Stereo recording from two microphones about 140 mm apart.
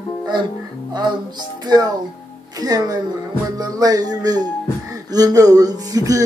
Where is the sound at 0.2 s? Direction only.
30° right (ahead or behind).